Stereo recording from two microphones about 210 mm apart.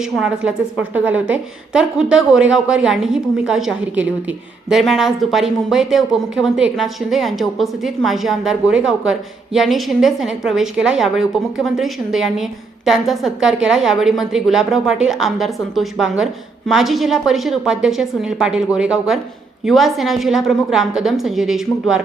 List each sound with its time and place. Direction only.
0.0 s a woman's voice: 5° right (ahead or behind)